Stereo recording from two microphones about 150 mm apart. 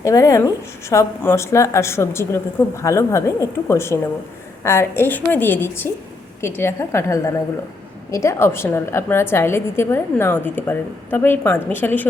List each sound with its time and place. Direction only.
0.0 s a woman's voice: 20° left (ahead or behind)